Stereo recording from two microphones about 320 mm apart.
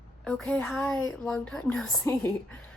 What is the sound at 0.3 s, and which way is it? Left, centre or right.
Speech, centre.